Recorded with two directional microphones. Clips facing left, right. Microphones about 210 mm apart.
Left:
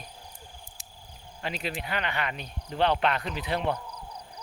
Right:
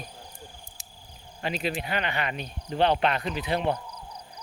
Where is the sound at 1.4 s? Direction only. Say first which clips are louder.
Right 4 dB; 20° right (ahead or behind).